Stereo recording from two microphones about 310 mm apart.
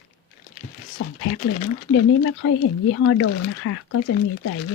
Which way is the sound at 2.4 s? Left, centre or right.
Left.